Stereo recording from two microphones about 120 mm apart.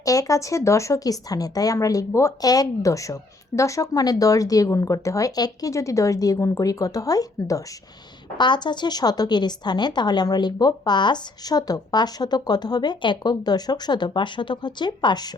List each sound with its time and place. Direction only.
0.0 s speech: 30° left (ahead or behind)
8.4 s speech: 40° left (ahead or behind)